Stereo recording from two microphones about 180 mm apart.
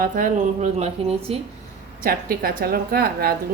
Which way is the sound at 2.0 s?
55° right (ahead or behind).